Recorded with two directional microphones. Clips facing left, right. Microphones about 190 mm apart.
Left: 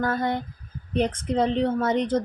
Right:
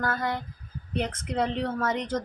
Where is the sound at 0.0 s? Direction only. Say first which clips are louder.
Left 4 dB; 30° left (ahead or behind).